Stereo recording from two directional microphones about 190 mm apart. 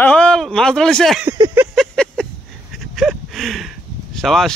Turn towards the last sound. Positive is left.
turn(degrees=0)  # may be behind; listen again after turning